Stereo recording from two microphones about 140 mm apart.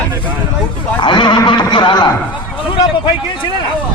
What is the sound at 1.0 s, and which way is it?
A man's voice, 35° left (ahead or behind).